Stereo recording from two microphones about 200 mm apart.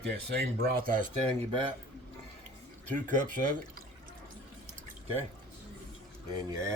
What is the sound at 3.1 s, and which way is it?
Speech, 40° right (ahead or behind).